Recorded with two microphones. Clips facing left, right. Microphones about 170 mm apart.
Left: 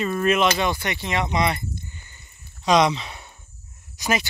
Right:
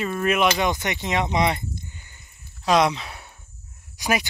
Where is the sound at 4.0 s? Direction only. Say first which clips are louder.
Even; 15° right (ahead or behind).